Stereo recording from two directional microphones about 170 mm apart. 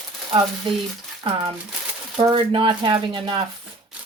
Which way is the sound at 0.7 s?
30° right (ahead or behind).